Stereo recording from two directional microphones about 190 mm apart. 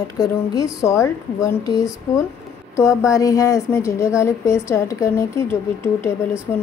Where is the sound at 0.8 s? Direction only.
15° left (ahead or behind).